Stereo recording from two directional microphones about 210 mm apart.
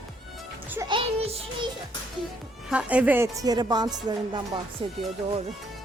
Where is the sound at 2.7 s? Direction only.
5° right (ahead or behind); by 5.0 s 25° right (ahead or behind).